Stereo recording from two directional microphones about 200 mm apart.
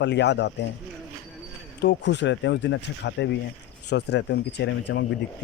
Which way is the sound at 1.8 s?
60° left (ahead or behind).